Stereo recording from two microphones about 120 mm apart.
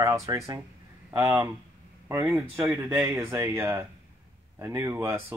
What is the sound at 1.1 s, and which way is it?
Speech, 25° right (ahead or behind).